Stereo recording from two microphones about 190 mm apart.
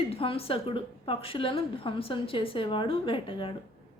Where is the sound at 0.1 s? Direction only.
30° left (ahead or behind).